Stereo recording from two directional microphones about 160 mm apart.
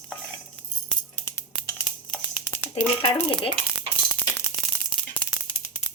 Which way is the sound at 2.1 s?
15° left (ahead or behind).